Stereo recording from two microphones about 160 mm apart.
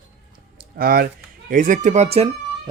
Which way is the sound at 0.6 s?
65° right (ahead or behind).